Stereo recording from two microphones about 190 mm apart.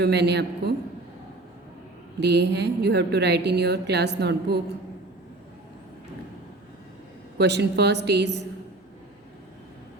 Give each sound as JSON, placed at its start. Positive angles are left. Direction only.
{"t": 0.0, "sound": "a woman's voice", "side_deg": -60}
{"t": 2.2, "sound": "a woman's voice", "side_deg": -60}
{"t": 7.3, "sound": "a woman's voice", "side_deg": -60}